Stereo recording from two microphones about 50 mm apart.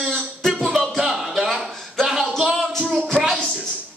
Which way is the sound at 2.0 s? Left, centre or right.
Centre.